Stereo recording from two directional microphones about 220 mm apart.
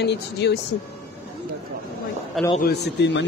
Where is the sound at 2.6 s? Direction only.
50° left (ahead or behind).